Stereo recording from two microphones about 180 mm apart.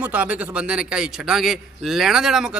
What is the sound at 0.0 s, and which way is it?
A man's voice, 10° right (ahead or behind).